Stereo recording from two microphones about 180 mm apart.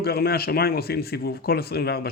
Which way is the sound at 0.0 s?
60° left (ahead or behind).